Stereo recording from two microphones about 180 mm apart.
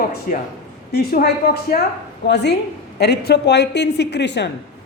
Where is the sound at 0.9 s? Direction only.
60° left (ahead or behind).